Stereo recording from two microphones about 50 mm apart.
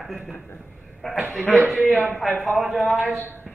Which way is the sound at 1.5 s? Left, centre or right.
Centre.